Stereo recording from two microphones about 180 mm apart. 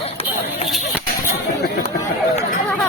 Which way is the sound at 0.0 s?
35° left (ahead or behind).